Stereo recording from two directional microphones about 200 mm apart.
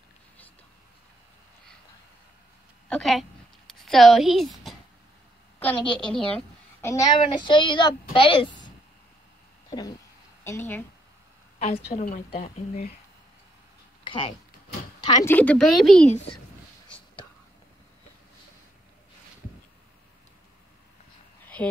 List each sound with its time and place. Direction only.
2.9 s a woman's voice: centre (ahead or behind); by 8.7 s 25° left (ahead or behind)
9.7 s a sound: 20° left (ahead or behind)
10.4 s a woman's voice: 10° left (ahead or behind)
11.6 s a woman's voice: 35° left (ahead or behind)
14.0 s speech: 25° left (ahead or behind)
15.0 s a sound: 20° left (ahead or behind)
15.3 s speech: 5° left (ahead or behind)